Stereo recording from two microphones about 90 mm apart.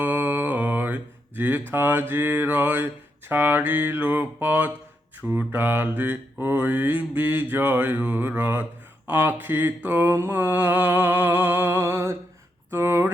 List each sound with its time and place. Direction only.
0.0 s mantra: 20° right (ahead or behind)